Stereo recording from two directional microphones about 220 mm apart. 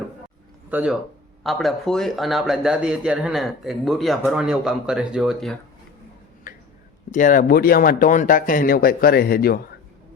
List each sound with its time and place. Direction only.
0.7 s a man's voice: 5° right (ahead or behind)
6.5 s a sound: 40° left (ahead or behind)
7.1 s speech: 35° left (ahead or behind)